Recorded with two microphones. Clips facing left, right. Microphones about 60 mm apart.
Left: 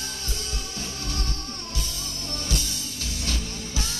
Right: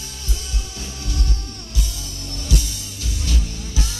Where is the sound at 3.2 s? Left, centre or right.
Left.